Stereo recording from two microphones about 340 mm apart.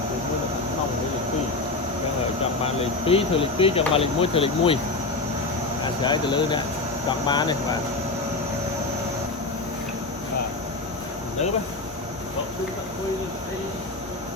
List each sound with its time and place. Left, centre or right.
2.6 s speech: centre
6.0 s speech: centre